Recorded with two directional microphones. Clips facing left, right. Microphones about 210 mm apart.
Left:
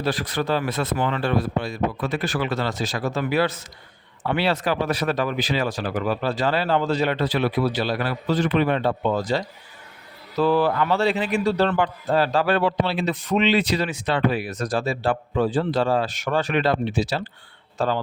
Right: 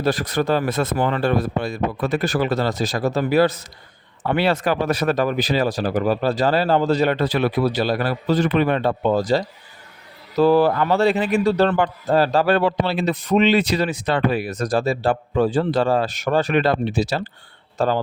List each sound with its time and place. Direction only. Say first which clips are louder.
0.0 s a man's voice: right 4 dB; 45° right (ahead or behind)